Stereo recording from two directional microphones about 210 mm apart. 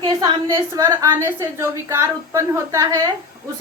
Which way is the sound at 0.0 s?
20° right (ahead or behind).